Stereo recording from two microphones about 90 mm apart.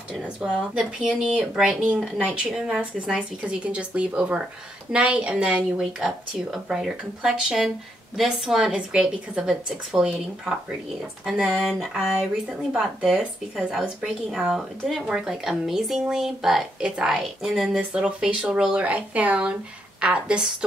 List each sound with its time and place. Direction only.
0.2 s speech: 10° right (ahead or behind)